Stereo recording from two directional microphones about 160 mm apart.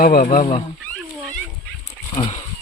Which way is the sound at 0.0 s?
60° left (ahead or behind).